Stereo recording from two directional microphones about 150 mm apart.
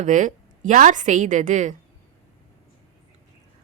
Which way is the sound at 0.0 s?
60° right (ahead or behind).